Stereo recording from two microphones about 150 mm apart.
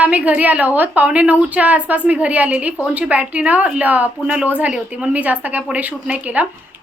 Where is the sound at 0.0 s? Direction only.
10° right (ahead or behind).